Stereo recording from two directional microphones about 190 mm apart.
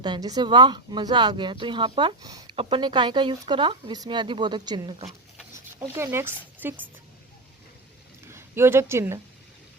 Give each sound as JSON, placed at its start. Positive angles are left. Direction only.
{"t": 0.0, "sound": "speech", "side_deg": -20}
{"t": 5.8, "sound": "speech", "side_deg": -15}
{"t": 8.3, "sound": "speech", "side_deg": -15}